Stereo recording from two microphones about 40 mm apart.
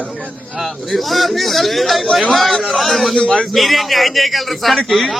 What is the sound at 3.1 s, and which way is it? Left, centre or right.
Speech, centre.